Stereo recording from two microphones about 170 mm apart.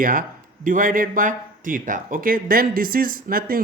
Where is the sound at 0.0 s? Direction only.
55° right (ahead or behind).